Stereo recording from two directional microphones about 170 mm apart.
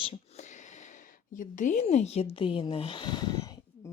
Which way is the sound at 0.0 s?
35° left (ahead or behind).